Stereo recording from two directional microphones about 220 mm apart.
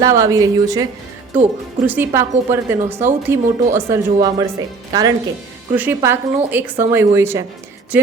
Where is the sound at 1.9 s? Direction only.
10° right (ahead or behind).